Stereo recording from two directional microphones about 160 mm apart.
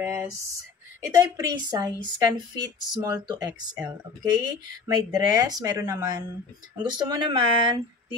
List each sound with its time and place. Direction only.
0.0 s speech: 15° right (ahead or behind)